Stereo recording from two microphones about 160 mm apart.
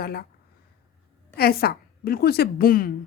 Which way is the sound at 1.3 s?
75° left (ahead or behind).